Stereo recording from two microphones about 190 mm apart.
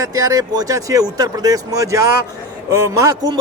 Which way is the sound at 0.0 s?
20° right (ahead or behind).